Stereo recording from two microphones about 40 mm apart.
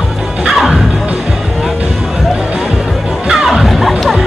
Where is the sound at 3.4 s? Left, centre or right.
Centre.